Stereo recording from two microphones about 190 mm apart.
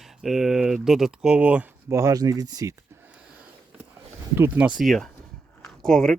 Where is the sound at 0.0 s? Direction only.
Centre (ahead or behind); by 3.0 s 20° right (ahead or behind).